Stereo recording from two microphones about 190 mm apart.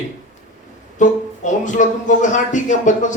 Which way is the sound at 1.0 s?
40° left (ahead or behind).